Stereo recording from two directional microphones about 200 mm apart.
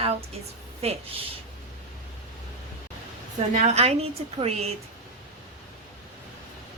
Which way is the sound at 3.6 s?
30° right (ahead or behind).